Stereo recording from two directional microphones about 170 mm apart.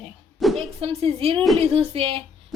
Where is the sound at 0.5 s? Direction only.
35° right (ahead or behind).